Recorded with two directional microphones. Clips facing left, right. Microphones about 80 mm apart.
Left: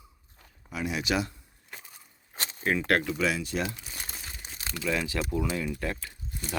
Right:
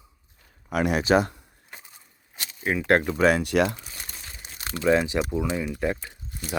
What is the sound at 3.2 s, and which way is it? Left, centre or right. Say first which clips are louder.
Speech: right 8 dB; right.